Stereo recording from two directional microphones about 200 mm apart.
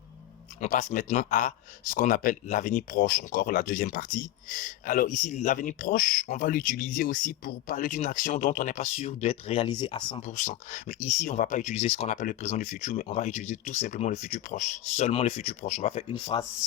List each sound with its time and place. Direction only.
0.6 s speech: 40° left (ahead or behind)
10.2 s speech: 40° left (ahead or behind)